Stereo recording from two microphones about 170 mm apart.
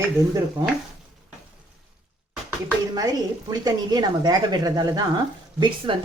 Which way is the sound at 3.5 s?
25° right (ahead or behind).